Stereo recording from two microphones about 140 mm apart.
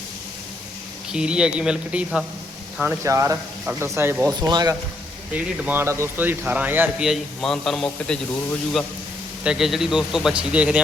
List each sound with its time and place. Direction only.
1.1 s a man's voice: 5° right (ahead or behind)
2.9 s a man's voice: 20° right (ahead or behind)
4.4 s speech: 30° right (ahead or behind)
5.3 s a man's voice: 15° right (ahead or behind)
7.1 s a man's voice: 5° left (ahead or behind)
9.4 s a man's voice: 5° right (ahead or behind)